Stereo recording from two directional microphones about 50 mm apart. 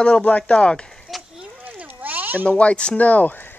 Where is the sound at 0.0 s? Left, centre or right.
Left.